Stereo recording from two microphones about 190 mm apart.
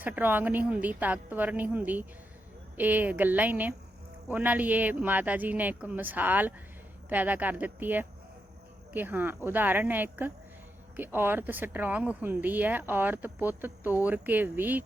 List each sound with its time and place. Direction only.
0.0 s speech: 10° right (ahead or behind)